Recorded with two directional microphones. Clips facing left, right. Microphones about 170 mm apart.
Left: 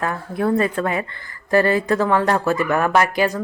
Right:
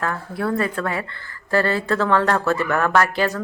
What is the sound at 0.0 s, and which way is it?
Speech, 20° left (ahead or behind).